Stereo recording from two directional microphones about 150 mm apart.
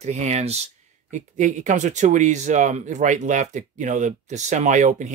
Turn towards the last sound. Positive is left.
turn(degrees=-55)  # may be behind; listen again after turning